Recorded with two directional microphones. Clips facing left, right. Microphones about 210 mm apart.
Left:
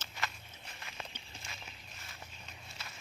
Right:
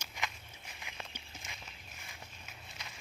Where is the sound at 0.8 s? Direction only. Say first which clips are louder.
Even; 15° right (ahead or behind).